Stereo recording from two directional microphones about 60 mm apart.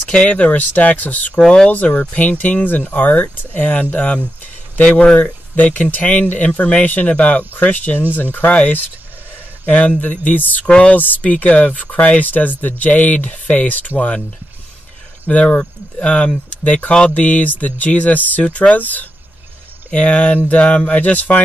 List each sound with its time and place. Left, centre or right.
0.1 s speech: centre
9.7 s speech: left
10.7 s speech: centre
11.0 s speech: left
15.2 s speech: left